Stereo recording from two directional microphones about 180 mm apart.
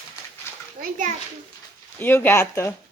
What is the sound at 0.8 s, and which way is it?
Speech, 45° right (ahead or behind).